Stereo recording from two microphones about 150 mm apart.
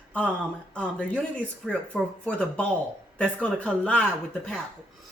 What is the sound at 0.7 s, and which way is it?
Speech, 5° left (ahead or behind).